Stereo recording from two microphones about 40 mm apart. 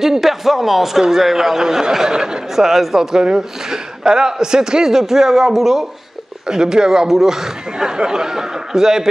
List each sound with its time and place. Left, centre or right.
0.0 s a man's voice: centre